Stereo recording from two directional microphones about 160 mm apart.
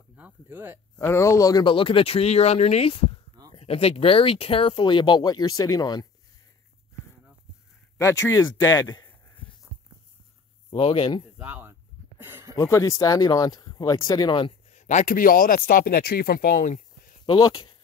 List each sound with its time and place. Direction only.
0.1 s speech: 10° right (ahead or behind)
0.9 s speech: 15° left (ahead or behind)
8.0 s speech: 20° left (ahead or behind)
10.7 s speech: 35° left (ahead or behind)
11.3 s speech: 10° right (ahead or behind)
12.2 s a sound: 15° right (ahead or behind)
12.5 s speech: 20° left (ahead or behind)
14.7 s speech: 50° left (ahead or behind)
17.3 s speech: 25° left (ahead or behind)